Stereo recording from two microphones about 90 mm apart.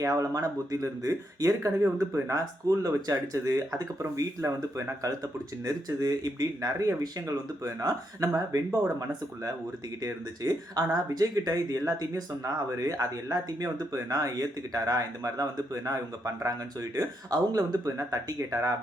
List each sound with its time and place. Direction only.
0.0 s speech: 40° right (ahead or behind)
10.0 s speech: 45° right (ahead or behind)